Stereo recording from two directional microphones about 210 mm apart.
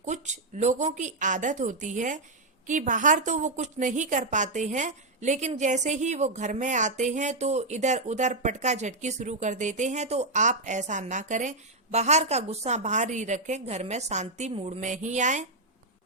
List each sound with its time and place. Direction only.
0.0 s a woman's voice: 35° right (ahead or behind)